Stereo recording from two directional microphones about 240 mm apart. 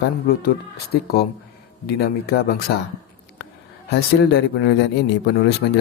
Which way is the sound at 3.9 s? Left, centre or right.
Left.